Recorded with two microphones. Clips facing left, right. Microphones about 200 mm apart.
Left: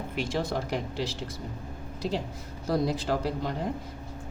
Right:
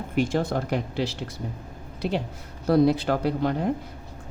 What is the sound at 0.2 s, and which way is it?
Speech, 50° right (ahead or behind).